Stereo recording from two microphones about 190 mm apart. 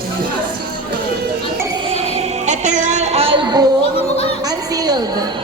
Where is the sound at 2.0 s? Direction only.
35° right (ahead or behind).